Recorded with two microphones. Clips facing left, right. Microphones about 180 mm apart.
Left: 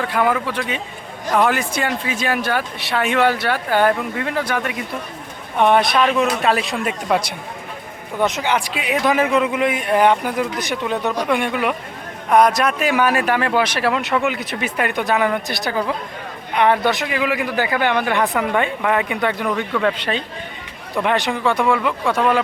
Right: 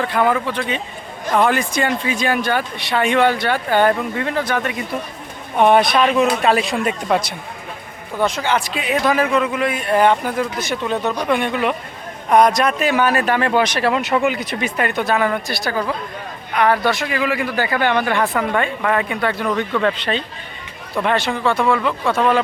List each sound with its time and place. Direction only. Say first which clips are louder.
0.0 s speech: right 1 dB; 5° left (ahead or behind)
5.5 s speech: right 2 dB; 5° right (ahead or behind)